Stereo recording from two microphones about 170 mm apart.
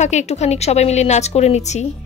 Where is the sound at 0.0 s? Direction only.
45° left (ahead or behind).